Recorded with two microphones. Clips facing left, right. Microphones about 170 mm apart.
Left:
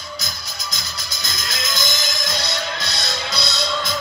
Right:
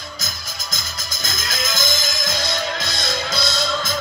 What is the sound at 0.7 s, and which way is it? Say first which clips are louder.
Music: right 1 dB; 50° right (ahead or behind).